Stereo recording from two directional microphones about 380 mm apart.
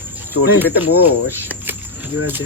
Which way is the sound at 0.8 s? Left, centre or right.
Left.